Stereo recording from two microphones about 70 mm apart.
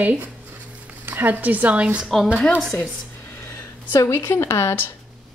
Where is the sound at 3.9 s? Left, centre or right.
Left.